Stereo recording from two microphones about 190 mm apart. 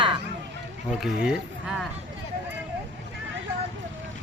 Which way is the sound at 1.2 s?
5° right (ahead or behind).